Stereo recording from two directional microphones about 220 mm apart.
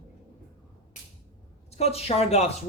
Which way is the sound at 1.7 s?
30° left (ahead or behind).